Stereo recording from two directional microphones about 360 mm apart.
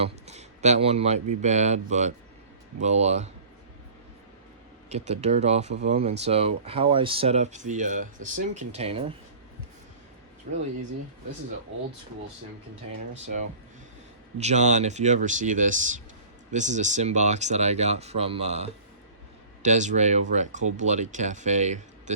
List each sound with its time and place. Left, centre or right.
0.0 s a sound: centre
1.4 s speech: centre
4.9 s speech: centre
14.3 s speech: centre